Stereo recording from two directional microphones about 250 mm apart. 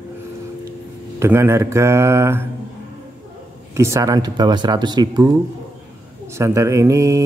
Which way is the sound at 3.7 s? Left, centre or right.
Centre.